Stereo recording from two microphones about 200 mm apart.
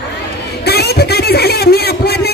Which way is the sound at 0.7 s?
50° left (ahead or behind).